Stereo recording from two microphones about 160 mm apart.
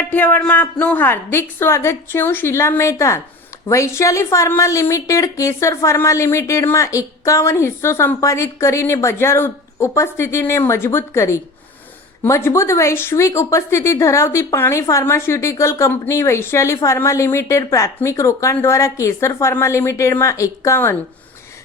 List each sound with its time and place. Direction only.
0.1 s speech: 10° left (ahead or behind)